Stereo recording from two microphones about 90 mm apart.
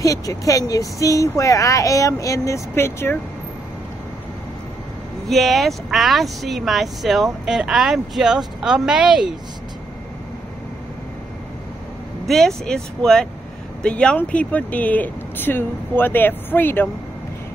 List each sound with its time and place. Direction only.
0.0 s speech: 35° left (ahead or behind)
5.3 s speech: centre (ahead or behind)
12.3 s speech: 5° left (ahead or behind); by 16.9 s 25° left (ahead or behind)